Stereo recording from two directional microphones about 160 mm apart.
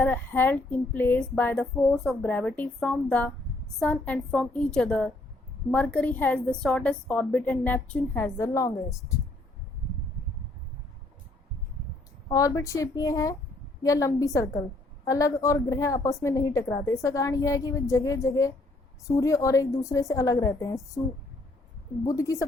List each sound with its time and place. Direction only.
0.0 s a woman's voice: 10° left (ahead or behind)
12.3 s a woman's voice: 20° left (ahead or behind)
22.0 s a woman's voice: 20° left (ahead or behind)